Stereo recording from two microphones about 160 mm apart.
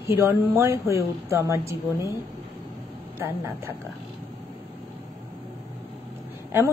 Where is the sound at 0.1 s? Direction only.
15° right (ahead or behind).